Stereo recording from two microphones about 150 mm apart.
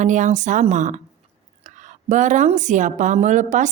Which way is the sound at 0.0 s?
55° right (ahead or behind).